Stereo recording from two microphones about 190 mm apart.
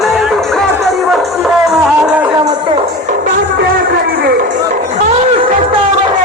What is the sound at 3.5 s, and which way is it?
Speech, 60° right (ahead or behind).